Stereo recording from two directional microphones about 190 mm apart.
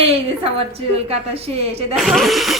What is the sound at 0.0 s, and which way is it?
A woman's voice, 30° right (ahead or behind).